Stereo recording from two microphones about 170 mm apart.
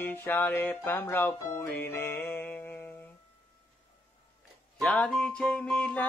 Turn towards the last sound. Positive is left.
turn(degrees=5)  # may be behind; listen again after turning